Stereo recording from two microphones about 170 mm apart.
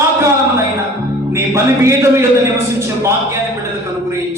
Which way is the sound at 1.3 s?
15° right (ahead or behind).